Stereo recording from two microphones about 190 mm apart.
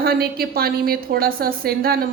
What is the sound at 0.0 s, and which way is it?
A woman's voice, 55° right (ahead or behind).